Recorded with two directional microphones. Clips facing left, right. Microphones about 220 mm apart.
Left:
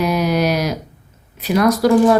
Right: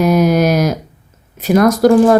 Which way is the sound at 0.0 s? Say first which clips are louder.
Right 5 dB; 45° right (ahead or behind).